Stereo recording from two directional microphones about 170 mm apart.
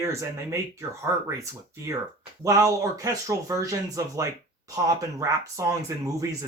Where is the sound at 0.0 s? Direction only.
15° right (ahead or behind).